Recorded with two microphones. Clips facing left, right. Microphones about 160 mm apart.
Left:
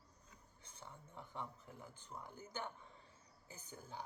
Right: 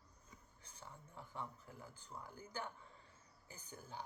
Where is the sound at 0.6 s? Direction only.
30° left (ahead or behind).